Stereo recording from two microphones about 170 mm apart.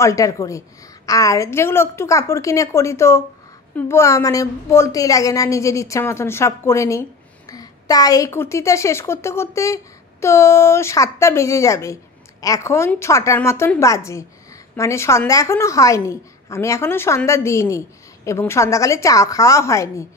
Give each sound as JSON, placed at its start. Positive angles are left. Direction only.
{"t": 0.0, "sound": "a woman's voice", "side_deg": 20}